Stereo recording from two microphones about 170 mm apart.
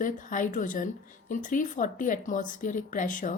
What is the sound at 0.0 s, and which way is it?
Speech, 50° left (ahead or behind).